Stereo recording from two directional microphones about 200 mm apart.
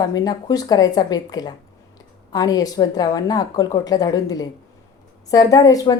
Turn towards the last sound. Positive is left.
turn(degrees=20)  # may be behind; listen again after turning